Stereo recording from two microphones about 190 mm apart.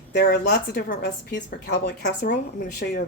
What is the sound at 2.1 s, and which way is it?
Speech, 45° left (ahead or behind).